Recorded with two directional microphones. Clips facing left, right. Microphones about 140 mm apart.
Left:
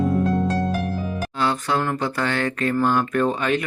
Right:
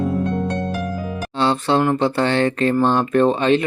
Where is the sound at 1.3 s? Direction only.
30° right (ahead or behind).